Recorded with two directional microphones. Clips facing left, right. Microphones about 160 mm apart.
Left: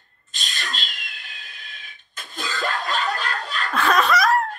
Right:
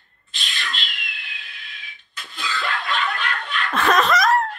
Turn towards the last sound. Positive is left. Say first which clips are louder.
# right 1 dB
turn(degrees=10)  # may be behind; listen again after turning